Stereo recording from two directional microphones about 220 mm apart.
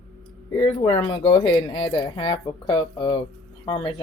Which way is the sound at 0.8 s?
25° left (ahead or behind).